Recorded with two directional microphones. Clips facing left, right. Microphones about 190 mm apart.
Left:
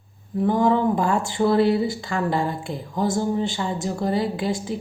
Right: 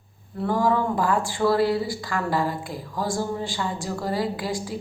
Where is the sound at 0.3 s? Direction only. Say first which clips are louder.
Left 3 dB; 20° left (ahead or behind).